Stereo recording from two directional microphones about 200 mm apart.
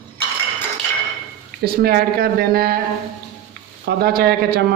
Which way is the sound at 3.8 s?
50° right (ahead or behind).